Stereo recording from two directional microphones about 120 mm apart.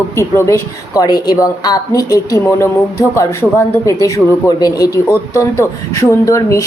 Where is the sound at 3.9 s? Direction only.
25° left (ahead or behind).